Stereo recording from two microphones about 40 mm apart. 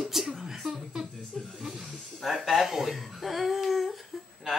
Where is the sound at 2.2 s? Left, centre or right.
Centre.